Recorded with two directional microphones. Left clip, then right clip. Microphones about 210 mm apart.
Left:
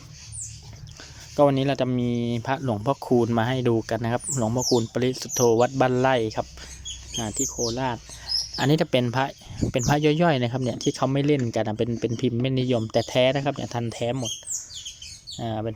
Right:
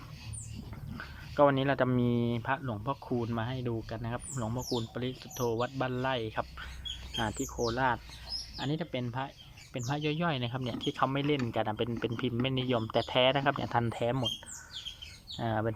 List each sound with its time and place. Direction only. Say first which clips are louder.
1.4 s speech: left 5 dB; 15° left (ahead or behind)
2.4 s speech: left 7 dB; 30° left (ahead or behind)
7.2 s speech: left 5 dB; 15° left (ahead or behind)
8.5 s speech: left 14 dB; 45° left (ahead or behind); by 14.3 s 10° left (ahead or behind)
15.4 s speech: left 2 dB; 10° left (ahead or behind)